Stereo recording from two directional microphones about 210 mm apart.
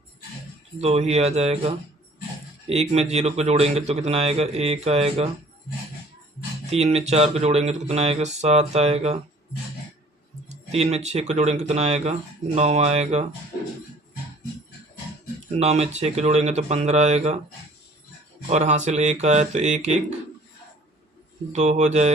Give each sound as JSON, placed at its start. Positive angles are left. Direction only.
{"t": 0.8, "sound": "a man's voice", "side_deg": -30}
{"t": 6.7, "sound": "speech", "side_deg": -30}
{"t": 10.5, "sound": "speech", "side_deg": -30}
{"t": 15.5, "sound": "speech", "side_deg": -30}
{"t": 18.4, "sound": "speech", "side_deg": -30}
{"t": 21.5, "sound": "speech", "side_deg": -35}